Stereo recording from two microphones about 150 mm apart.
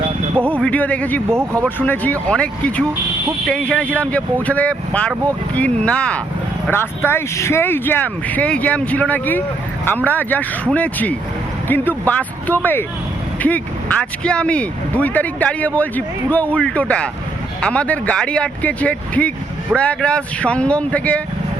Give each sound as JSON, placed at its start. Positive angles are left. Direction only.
{"t": 0.4, "sound": "speech", "side_deg": 10}
{"t": 1.4, "sound": "speech", "side_deg": -15}
{"t": 1.8, "sound": "speech", "side_deg": 10}